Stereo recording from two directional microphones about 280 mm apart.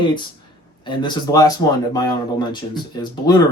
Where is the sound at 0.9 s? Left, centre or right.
Centre.